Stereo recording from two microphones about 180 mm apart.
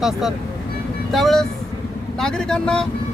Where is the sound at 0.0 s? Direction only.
Centre (ahead or behind).